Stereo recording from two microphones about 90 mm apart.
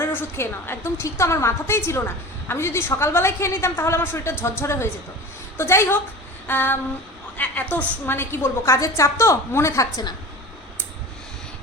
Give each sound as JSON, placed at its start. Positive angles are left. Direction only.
{"t": 0.0, "sound": "a woman's voice", "side_deg": 25}